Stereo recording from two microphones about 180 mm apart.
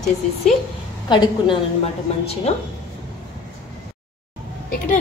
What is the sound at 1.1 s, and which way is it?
A woman's voice, 30° left (ahead or behind).